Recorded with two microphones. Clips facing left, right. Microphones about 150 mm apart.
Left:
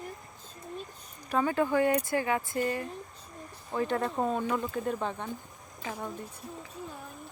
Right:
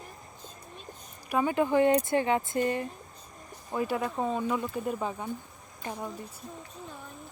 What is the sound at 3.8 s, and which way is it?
Speech, 10° right (ahead or behind).